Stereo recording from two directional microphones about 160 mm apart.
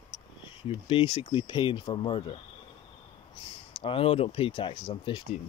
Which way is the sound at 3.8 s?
35° left (ahead or behind).